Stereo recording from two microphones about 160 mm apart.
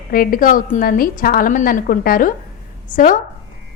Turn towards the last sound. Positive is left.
turn(degrees=55)  # may be behind; listen again after turning